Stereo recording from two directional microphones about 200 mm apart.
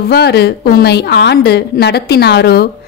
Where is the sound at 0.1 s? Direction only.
55° left (ahead or behind).